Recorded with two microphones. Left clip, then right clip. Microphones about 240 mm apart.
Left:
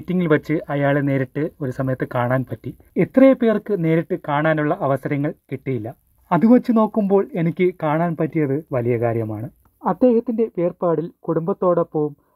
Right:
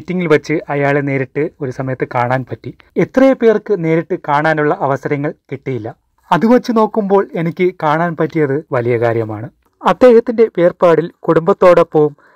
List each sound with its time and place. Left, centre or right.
0.1 s speech: centre
9.8 s speech: right